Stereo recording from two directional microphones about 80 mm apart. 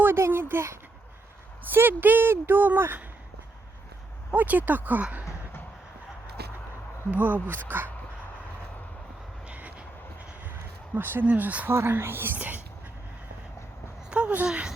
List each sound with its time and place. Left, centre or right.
0.0 s speech: right
4.3 s speech: right
7.1 s speech: right
9.5 s vehicle: centre
10.9 s speech: right
11.7 s speech: right
14.1 s speech: centre